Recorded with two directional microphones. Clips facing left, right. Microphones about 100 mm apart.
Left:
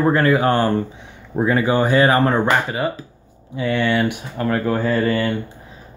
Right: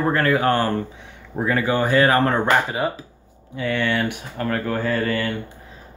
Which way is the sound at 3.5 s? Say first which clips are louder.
Left 3 dB; 15° left (ahead or behind).